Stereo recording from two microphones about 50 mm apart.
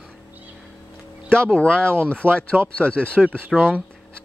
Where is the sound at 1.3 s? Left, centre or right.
Left.